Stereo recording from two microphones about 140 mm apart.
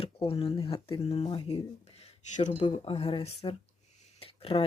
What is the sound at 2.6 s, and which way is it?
Speech, 40° left (ahead or behind).